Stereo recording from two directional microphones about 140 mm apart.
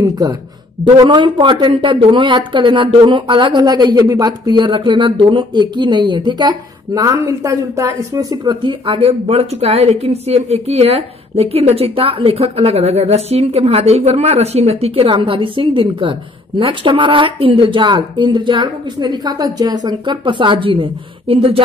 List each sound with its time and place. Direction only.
0.0 s a man's voice: 25° right (ahead or behind)